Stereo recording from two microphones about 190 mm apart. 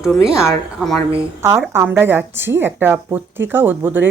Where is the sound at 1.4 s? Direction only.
15° right (ahead or behind).